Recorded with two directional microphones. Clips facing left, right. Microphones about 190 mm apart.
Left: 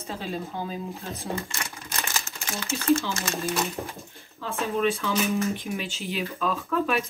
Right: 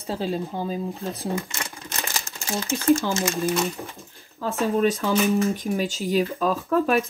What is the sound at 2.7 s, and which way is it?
Speech, 50° right (ahead or behind).